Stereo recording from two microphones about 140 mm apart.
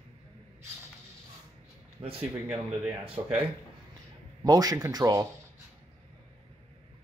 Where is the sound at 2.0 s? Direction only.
40° right (ahead or behind).